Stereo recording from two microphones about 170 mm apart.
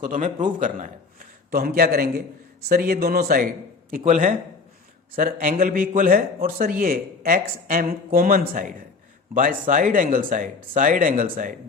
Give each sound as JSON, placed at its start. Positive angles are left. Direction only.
{"t": 0.0, "sound": "a man's voice", "side_deg": -50}
{"t": 4.0, "sound": "a man's voice", "side_deg": -40}
{"t": 5.1, "sound": "a man's voice", "side_deg": -55}